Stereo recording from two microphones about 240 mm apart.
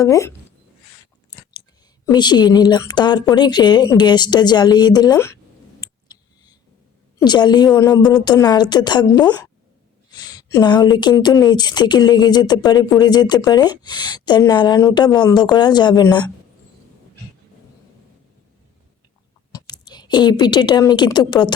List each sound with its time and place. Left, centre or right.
0.0 s speech: centre
2.0 s speech: centre
5.8 s a sound: centre
7.2 s speech: centre
19.5 s speech: centre